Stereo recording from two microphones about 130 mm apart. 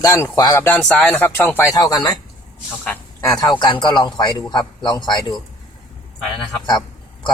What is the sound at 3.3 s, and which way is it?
A man's voice, 30° left (ahead or behind).